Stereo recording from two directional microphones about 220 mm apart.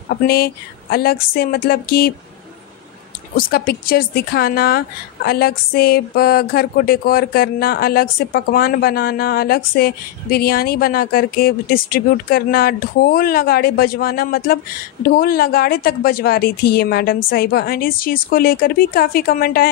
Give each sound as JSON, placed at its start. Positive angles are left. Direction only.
{"t": 0.1, "sound": "speech", "side_deg": 45}
{"t": 3.3, "sound": "speech", "side_deg": 45}